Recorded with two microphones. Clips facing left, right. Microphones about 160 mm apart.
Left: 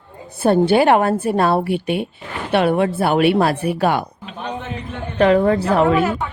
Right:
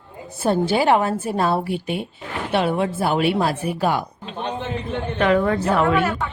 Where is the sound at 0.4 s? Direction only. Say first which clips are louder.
Left 5 dB; 60° left (ahead or behind).